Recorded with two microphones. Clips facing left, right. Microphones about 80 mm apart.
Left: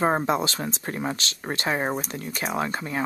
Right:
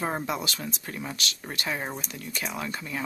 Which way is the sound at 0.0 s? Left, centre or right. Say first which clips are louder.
Left 7 dB; left.